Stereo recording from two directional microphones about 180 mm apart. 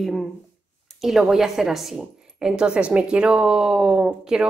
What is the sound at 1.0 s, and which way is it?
Speech, centre (ahead or behind).